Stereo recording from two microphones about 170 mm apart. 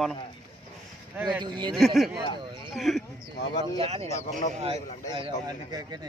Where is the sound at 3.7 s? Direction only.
40° right (ahead or behind).